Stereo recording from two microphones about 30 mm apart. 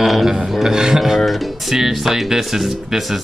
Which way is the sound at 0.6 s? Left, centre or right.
Centre.